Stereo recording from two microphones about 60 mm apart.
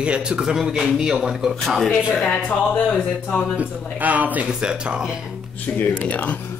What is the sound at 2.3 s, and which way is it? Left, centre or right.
Speech, left.